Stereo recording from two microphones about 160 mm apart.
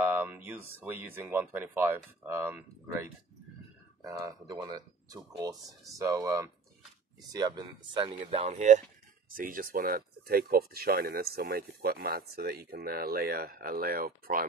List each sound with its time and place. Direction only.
0.0 s speech: 15° right (ahead or behind)
4.5 s speech: 25° right (ahead or behind); by 8.8 s 50° right (ahead or behind)
9.3 s speech: 60° right (ahead or behind)